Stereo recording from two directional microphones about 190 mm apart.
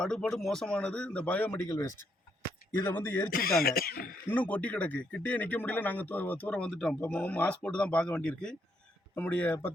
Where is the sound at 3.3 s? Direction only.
50° left (ahead or behind).